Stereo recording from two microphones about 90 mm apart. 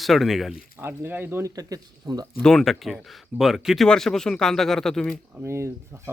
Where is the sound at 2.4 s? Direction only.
5° left (ahead or behind).